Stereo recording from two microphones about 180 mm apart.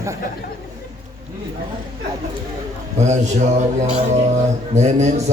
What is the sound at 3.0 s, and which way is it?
A man's voice, 40° right (ahead or behind).